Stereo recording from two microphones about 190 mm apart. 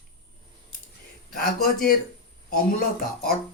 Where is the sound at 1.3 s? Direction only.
50° left (ahead or behind).